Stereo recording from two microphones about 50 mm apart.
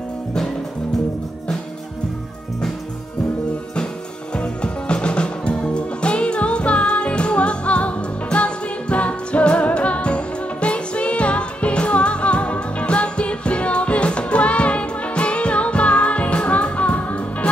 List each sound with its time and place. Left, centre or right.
4.4 s music: centre